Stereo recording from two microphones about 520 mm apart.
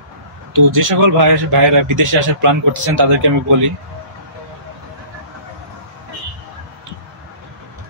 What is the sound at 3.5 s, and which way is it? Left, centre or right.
Speech, right.